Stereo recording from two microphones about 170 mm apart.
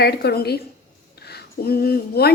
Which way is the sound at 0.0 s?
70° left (ahead or behind).